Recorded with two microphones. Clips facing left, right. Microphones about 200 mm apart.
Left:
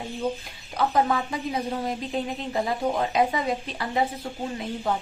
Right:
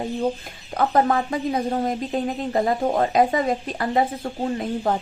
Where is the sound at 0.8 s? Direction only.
50° right (ahead or behind).